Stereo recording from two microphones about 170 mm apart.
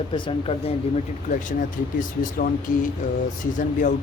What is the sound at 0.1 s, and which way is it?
Speech, 35° left (ahead or behind).